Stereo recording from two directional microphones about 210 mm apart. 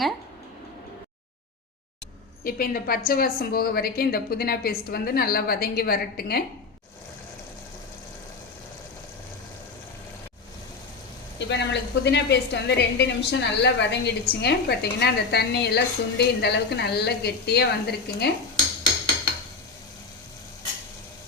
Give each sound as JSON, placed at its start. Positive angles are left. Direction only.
{"t": 2.4, "sound": "a woman's voice", "side_deg": 45}
{"t": 11.3, "sound": "a woman's voice", "side_deg": 55}